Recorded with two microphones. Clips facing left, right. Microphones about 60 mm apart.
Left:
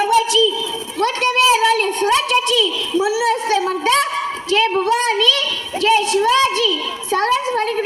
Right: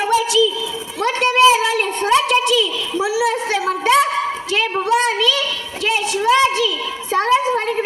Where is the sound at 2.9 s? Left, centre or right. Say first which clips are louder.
Left 1 dB; centre.